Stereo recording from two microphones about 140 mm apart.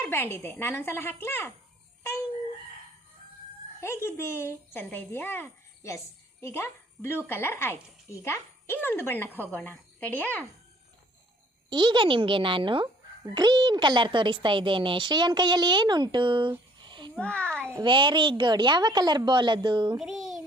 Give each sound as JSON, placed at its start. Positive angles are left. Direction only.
{"t": 0.0, "sound": "speech", "side_deg": 15}
{"t": 3.8, "sound": "speech", "side_deg": 15}
{"t": 11.7, "sound": "speech", "side_deg": -30}
{"t": 16.5, "sound": "a sound", "side_deg": -35}
{"t": 17.2, "sound": "speech", "side_deg": 10}
{"t": 17.8, "sound": "speech", "side_deg": -35}
{"t": 20.0, "sound": "a child's voice", "side_deg": 0}